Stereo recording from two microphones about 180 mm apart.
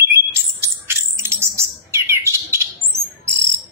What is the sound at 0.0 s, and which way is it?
Bird, 15° right (ahead or behind).